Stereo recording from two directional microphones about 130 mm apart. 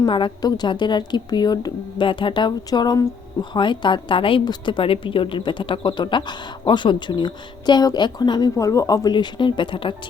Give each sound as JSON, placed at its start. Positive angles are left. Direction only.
{"t": 0.0, "sound": "a woman's voice", "side_deg": 35}